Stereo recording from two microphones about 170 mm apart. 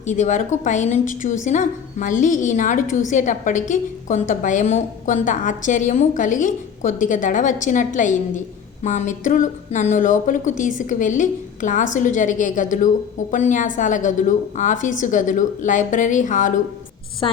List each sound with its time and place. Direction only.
0.0 s a woman's voice: 45° left (ahead or behind)